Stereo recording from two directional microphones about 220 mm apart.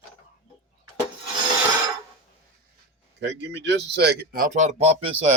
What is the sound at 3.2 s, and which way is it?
Speech, 50° right (ahead or behind).